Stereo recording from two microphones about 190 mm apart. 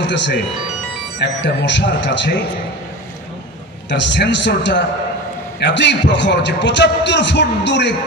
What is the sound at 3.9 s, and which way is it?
A man's voice, 65° left (ahead or behind).